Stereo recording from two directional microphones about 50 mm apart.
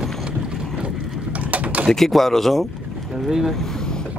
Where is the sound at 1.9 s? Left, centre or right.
Centre.